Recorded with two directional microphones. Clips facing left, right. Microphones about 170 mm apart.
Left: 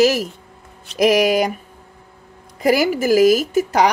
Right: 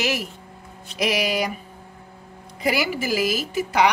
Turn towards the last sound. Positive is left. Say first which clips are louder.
# left 4 dB
turn(degrees=45)  # may be behind; listen again after turning